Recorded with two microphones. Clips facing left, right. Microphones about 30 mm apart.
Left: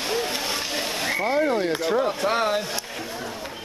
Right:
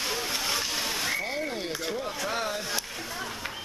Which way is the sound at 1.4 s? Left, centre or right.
Left.